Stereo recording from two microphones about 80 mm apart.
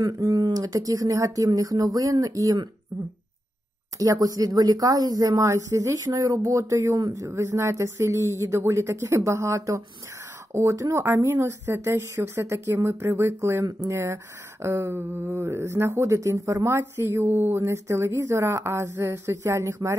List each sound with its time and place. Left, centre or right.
0.0 s speech: right
4.0 s speech: right